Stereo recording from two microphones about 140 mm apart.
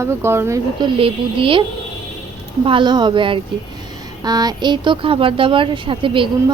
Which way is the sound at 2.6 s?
35° right (ahead or behind).